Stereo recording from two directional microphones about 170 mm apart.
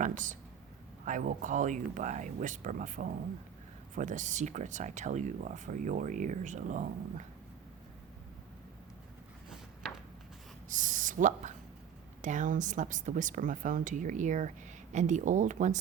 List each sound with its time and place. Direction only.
0.0 s speech: 50° right (ahead or behind)
10.7 s speech: 50° right (ahead or behind)